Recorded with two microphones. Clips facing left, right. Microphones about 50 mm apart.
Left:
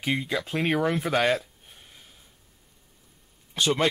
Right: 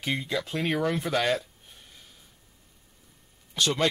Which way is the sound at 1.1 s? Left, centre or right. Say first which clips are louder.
Left 2 dB; centre.